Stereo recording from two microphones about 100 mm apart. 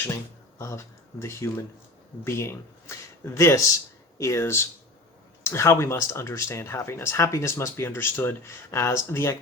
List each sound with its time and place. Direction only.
0.6 s speech: 30° left (ahead or behind)